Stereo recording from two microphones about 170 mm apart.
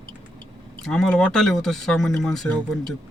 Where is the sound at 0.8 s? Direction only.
5° left (ahead or behind).